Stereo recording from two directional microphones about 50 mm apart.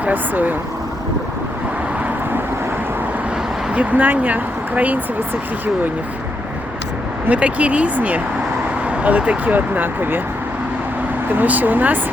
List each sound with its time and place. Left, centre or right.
0.0 s speech: right
3.8 s speech: right
7.3 s speech: right
11.3 s speech: right